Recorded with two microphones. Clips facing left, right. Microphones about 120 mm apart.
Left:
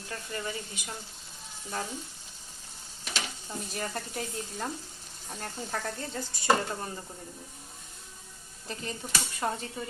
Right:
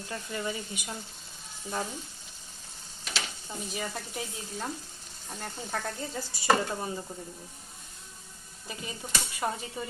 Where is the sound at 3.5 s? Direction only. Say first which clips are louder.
Right 1 dB; 5° right (ahead or behind).